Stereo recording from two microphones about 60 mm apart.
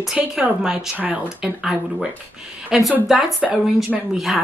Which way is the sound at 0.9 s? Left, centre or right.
Right.